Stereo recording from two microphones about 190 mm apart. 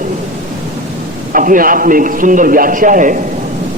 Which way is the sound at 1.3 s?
45° right (ahead or behind).